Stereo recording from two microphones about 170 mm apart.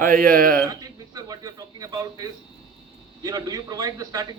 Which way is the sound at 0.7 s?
20° right (ahead or behind).